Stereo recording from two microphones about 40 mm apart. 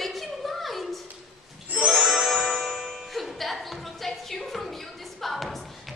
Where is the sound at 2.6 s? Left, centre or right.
Centre.